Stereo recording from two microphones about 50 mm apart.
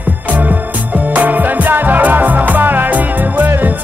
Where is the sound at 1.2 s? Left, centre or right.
Right.